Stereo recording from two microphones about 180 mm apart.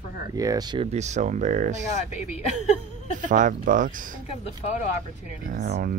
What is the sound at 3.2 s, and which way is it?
Speech, 45° right (ahead or behind).